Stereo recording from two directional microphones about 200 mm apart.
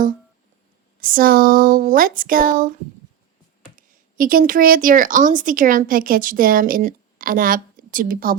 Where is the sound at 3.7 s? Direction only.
45° right (ahead or behind).